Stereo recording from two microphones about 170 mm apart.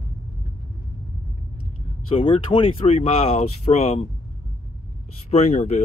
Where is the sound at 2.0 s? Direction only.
30° left (ahead or behind).